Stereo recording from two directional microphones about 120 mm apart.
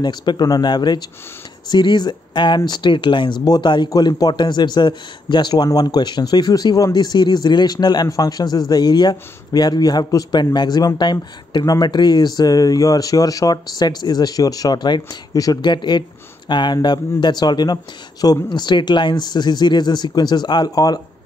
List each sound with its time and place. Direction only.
0.0 s speech: 35° left (ahead or behind)